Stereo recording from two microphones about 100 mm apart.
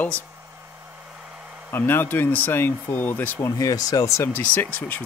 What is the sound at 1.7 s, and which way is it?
Speech, 20° left (ahead or behind).